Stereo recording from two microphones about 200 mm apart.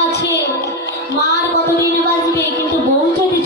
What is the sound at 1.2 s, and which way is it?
Music, 15° left (ahead or behind).